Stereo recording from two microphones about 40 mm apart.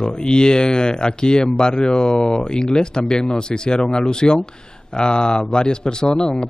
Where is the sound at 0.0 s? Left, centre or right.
Left.